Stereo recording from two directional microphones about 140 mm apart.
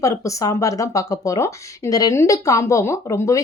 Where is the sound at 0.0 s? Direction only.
20° left (ahead or behind).